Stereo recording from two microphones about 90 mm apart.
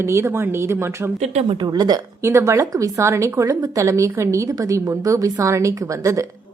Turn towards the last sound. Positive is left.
turn(degrees=-35)  # may be behind; listen again after turning